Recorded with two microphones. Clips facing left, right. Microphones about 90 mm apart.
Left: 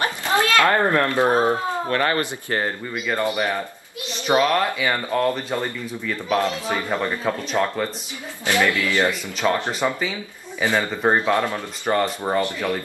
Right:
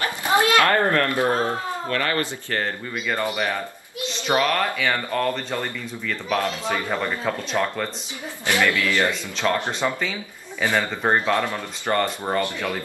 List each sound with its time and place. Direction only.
0.2 s a sound: 20° right (ahead or behind)
0.7 s a man's voice: 20° left (ahead or behind)
1.9 s a man's voice: 30° left (ahead or behind); by 7.9 s 5° left (ahead or behind)
8.5 s a man's voice: 20° left (ahead or behind)